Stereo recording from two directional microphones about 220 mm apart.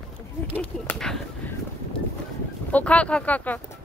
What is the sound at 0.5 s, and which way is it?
Speech, 5° left (ahead or behind).